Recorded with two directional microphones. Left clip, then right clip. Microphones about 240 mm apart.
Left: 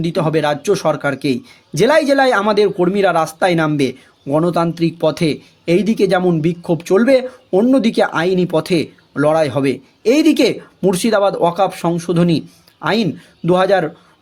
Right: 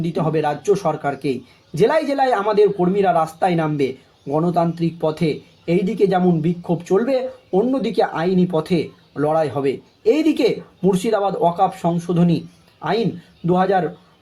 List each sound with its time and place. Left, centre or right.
0.0 s speech: left